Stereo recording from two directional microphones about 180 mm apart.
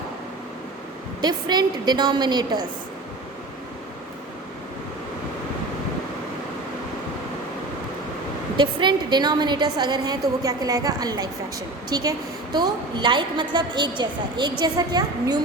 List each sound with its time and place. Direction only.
1.2 s a woman's voice: 25° right (ahead or behind)
8.5 s a woman's voice: 25° right (ahead or behind)